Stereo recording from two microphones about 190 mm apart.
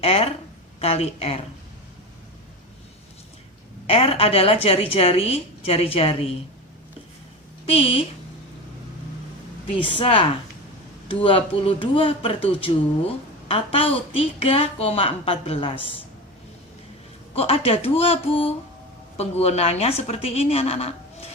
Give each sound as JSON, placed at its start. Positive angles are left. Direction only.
{"t": 0.0, "sound": "a woman's voice", "side_deg": 30}
{"t": 3.8, "sound": "a woman's voice", "side_deg": 30}
{"t": 7.7, "sound": "a woman's voice", "side_deg": 30}
{"t": 9.7, "sound": "a woman's voice", "side_deg": 25}
{"t": 17.3, "sound": "a woman's voice", "side_deg": 30}